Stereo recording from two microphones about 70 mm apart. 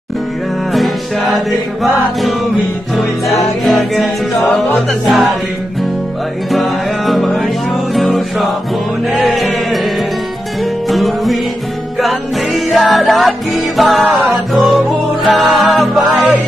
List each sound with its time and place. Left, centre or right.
1.3 s music: centre
3.6 s music: centre
6.5 s music: centre
9.1 s sheep: centre
10.9 s music: centre
15.2 s music: centre